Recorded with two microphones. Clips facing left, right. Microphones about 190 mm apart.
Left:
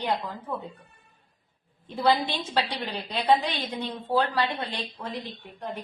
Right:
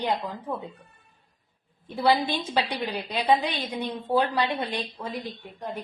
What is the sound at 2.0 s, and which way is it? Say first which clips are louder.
A woman's voice: right 1 dB; 10° right (ahead or behind).